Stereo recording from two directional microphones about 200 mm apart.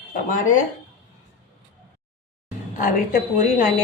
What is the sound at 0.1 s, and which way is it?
Speech, 40° left (ahead or behind).